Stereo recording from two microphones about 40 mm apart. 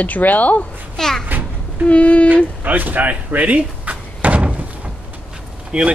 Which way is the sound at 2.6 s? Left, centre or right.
Right.